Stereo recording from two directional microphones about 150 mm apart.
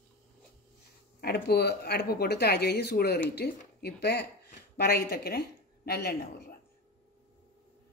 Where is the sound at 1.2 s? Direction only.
90° left.